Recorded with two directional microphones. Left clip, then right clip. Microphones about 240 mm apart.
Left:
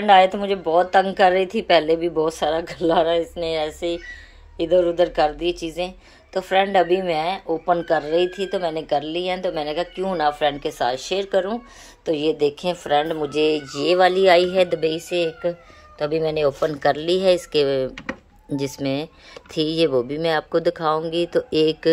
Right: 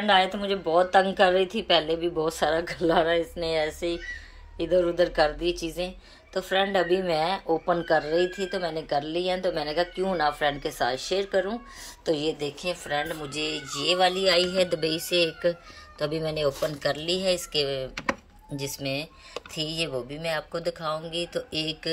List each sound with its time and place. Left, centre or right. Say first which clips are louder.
0.0 s speech: left 8 dB; centre